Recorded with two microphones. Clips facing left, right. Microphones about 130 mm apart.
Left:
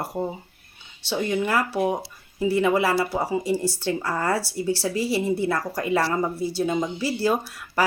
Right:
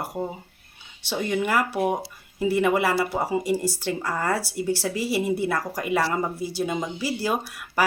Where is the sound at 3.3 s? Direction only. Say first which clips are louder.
Even; 10° right (ahead or behind).